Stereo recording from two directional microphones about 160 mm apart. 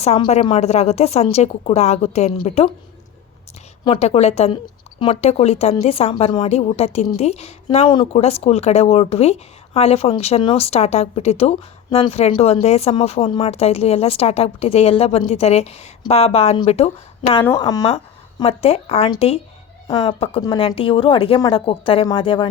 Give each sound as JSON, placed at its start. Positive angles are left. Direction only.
{"t": 0.0, "sound": "speech", "side_deg": 40}
{"t": 3.8, "sound": "a woman's voice", "side_deg": 35}
{"t": 7.9, "sound": "speech", "side_deg": 30}
{"t": 8.2, "sound": "speech", "side_deg": 40}
{"t": 17.6, "sound": "speech", "side_deg": 25}